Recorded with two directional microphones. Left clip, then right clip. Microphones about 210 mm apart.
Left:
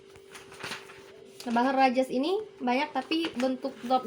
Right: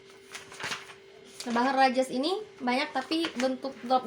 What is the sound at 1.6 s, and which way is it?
A woman's voice, 25° right (ahead or behind).